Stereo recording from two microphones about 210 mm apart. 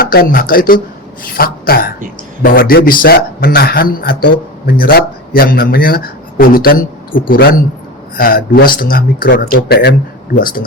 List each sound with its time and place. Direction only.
0.0 s speech: 45° left (ahead or behind)